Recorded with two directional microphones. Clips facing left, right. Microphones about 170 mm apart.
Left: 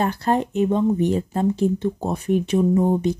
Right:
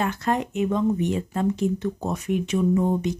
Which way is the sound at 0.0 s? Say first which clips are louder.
Left 4 dB; 35° left (ahead or behind).